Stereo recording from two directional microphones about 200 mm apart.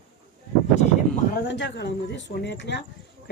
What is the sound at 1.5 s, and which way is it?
Speech, 60° left (ahead or behind).